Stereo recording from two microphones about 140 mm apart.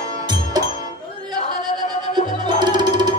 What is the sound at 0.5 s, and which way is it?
Music, 30° right (ahead or behind).